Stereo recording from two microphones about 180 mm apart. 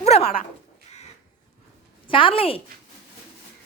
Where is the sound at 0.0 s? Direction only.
35° left (ahead or behind).